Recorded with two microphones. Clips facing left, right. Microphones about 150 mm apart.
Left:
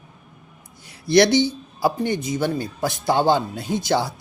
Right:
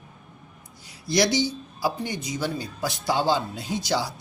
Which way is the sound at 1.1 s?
60° left (ahead or behind).